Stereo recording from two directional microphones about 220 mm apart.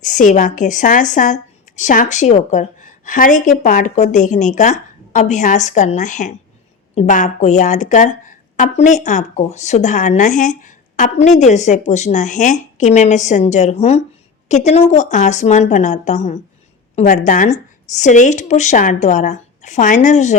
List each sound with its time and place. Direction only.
0.0 s speech: 35° left (ahead or behind)